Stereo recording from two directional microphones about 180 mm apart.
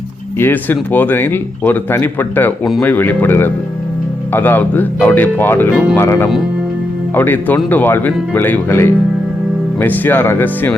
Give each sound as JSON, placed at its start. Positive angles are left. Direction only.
{"t": 0.3, "sound": "speech", "side_deg": 10}
{"t": 7.2, "sound": "speech", "side_deg": 10}